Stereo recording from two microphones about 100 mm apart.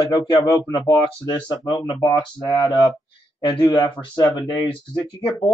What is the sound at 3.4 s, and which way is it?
Speech, 50° left (ahead or behind).